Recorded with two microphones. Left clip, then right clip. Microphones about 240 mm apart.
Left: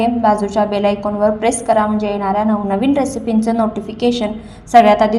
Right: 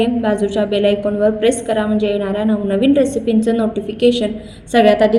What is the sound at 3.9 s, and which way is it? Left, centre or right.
Speech, left.